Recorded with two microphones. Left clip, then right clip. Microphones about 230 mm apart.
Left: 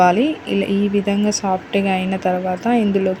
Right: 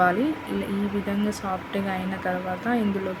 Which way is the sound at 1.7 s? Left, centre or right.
Left.